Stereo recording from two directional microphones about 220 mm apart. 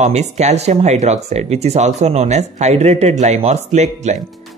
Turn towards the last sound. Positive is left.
turn(degrees=-30)  # may be behind; listen again after turning